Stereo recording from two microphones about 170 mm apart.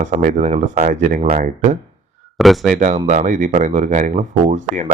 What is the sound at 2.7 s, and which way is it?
Speech, 45° right (ahead or behind).